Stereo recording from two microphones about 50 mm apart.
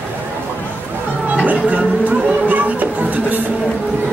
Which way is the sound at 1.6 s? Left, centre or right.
Right.